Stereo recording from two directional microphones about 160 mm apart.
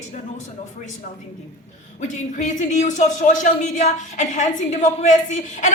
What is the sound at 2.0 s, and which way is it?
Speech, 50° left (ahead or behind).